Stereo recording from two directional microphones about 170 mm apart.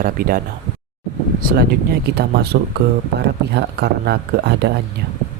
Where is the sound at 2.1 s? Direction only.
70° right (ahead or behind).